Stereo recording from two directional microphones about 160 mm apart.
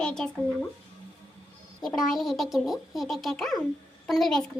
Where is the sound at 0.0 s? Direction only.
5° left (ahead or behind).